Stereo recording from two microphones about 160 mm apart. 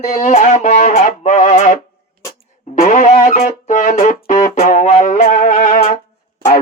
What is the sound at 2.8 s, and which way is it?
Music, 50° left (ahead or behind).